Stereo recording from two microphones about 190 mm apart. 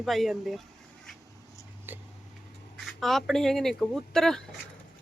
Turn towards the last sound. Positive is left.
turn(degrees=0)  # may be behind; listen again after turning